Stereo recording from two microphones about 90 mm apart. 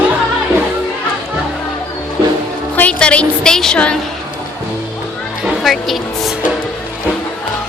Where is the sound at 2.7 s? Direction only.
15° left (ahead or behind).